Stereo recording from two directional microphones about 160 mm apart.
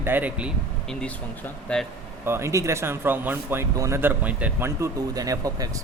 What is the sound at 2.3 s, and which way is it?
Speech, 15° right (ahead or behind).